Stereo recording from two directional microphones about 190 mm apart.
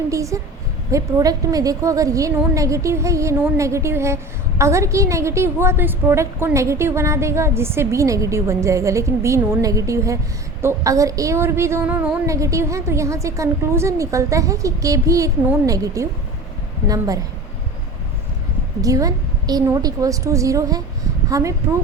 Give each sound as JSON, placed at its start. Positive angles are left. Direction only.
{"t": 0.1, "sound": "a woman's voice", "side_deg": -15}
{"t": 18.8, "sound": "a woman's voice", "side_deg": -20}